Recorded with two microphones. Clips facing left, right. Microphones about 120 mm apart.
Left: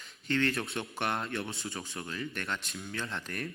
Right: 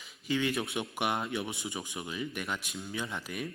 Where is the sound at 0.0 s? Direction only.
10° right (ahead or behind).